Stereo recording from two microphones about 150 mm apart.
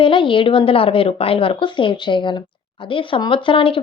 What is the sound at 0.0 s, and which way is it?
A woman's voice, 35° left (ahead or behind).